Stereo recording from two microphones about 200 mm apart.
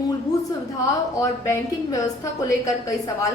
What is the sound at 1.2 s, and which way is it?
Speech, 15° left (ahead or behind).